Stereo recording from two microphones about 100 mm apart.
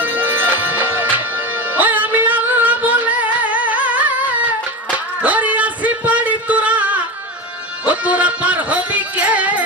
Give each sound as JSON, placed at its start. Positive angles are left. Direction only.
{"t": 0.0, "sound": "music", "side_deg": -20}
{"t": 5.2, "sound": "a sound", "side_deg": -15}
{"t": 7.9, "sound": "music", "side_deg": -15}